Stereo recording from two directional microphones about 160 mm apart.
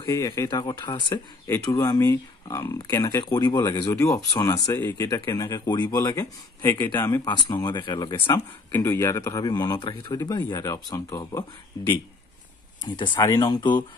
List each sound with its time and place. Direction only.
0.1 s speech: 20° left (ahead or behind)
3.9 s a man's voice: 15° left (ahead or behind)
7.5 s speech: 25° left (ahead or behind)
8.7 s a man's voice: 15° left (ahead or behind)
12.8 s speech: 30° left (ahead or behind)